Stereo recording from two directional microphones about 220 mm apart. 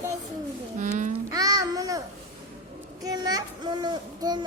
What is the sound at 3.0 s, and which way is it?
A child's voice, 15° right (ahead or behind).